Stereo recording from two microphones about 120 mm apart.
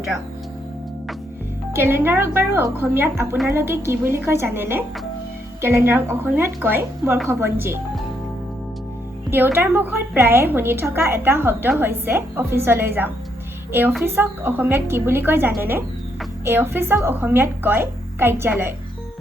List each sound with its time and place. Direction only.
1.7 s a woman's voice: 20° right (ahead or behind)
9.3 s a woman's voice: 15° right (ahead or behind)